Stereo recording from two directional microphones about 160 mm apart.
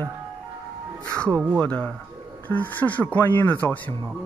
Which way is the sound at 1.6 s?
5° left (ahead or behind).